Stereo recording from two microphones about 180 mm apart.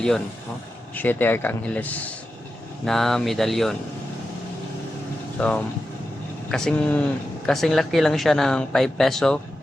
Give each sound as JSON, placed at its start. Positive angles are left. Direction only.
{"t": 0.9, "sound": "speech", "side_deg": 10}
{"t": 5.4, "sound": "speech", "side_deg": 5}